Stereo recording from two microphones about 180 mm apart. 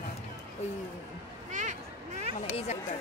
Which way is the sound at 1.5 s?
45° right (ahead or behind).